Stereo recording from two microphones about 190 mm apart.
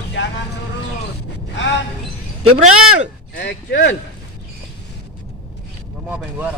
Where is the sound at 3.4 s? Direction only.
60° left (ahead or behind).